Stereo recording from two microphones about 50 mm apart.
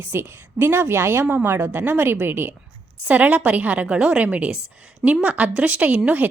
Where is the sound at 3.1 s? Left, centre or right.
Right.